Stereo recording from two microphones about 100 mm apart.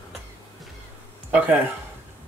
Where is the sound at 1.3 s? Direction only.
15° right (ahead or behind).